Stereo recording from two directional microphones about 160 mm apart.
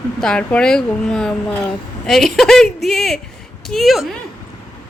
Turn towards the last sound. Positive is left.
turn(degrees=0)  # may be behind; listen again after turning